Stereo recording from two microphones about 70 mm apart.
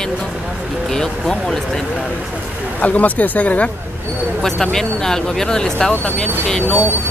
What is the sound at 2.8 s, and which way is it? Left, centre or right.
Speech, left.